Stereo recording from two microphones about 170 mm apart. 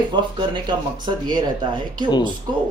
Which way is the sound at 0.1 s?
25° right (ahead or behind).